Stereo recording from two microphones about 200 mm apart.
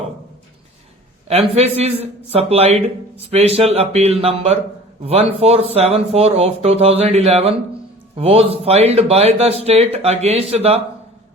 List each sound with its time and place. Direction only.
1.5 s a man's voice: 30° right (ahead or behind)